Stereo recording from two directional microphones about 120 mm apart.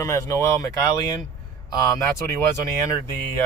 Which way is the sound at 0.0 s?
25° left (ahead or behind).